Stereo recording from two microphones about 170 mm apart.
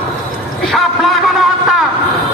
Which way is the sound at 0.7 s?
Centre (ahead or behind).